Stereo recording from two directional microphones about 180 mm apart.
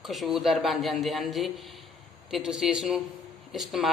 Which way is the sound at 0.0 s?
Centre (ahead or behind).